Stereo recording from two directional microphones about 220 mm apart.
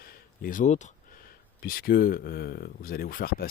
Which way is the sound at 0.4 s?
35° left (ahead or behind).